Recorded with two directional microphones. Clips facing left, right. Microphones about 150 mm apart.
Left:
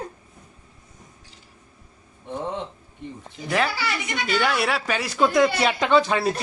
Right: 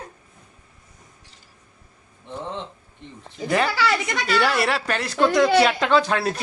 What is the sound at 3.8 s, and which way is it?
Speech, 90° right.